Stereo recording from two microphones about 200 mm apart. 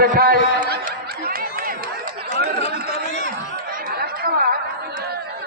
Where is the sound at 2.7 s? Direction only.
50° right (ahead or behind).